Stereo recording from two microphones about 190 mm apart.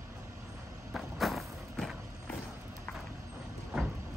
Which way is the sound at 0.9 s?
Centre (ahead or behind).